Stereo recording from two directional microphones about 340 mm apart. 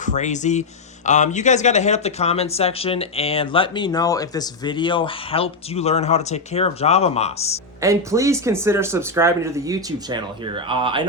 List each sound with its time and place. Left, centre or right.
0.0 s speech: left
7.8 s speech: centre